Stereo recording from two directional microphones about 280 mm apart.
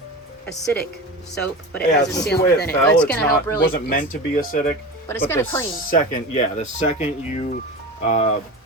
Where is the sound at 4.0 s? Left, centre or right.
Left.